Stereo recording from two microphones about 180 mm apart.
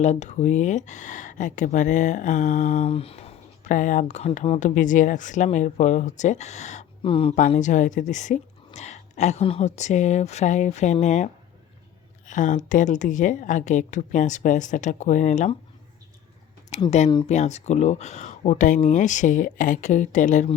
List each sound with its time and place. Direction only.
0.0 s speech: 40° left (ahead or behind)
7.5 s speech: 45° left (ahead or behind)
12.3 s speech: 45° left (ahead or behind)
16.7 s speech: 40° left (ahead or behind)